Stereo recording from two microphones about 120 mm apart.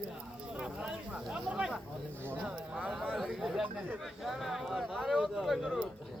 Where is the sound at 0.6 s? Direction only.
10° right (ahead or behind).